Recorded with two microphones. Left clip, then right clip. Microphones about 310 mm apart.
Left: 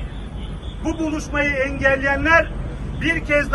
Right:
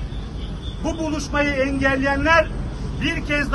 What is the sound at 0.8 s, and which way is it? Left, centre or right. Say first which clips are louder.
A man's voice: left 1 dB; right.